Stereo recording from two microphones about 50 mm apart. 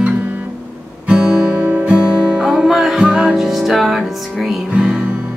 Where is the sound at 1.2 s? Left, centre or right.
Centre.